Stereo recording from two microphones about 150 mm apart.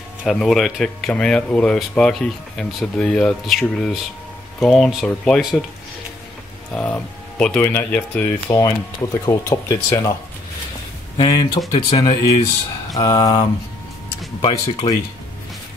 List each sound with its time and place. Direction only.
0.2 s speech: centre (ahead or behind)
6.7 s speech: 5° left (ahead or behind); by 10.1 s 30° left (ahead or behind)
11.1 s speech: 30° left (ahead or behind)